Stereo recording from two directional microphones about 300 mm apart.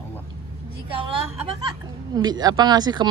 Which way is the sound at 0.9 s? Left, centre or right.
Centre.